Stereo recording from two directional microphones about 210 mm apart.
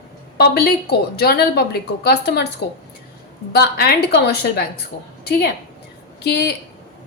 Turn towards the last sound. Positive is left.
turn(degrees=50)  # may be behind; listen again after turning